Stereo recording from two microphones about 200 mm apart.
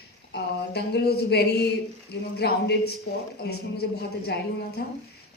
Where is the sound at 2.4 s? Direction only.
55° left (ahead or behind).